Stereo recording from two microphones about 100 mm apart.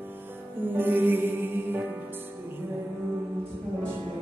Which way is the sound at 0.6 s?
20° right (ahead or behind).